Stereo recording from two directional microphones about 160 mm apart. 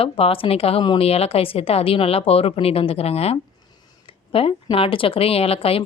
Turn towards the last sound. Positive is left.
turn(degrees=35)  # may be behind; listen again after turning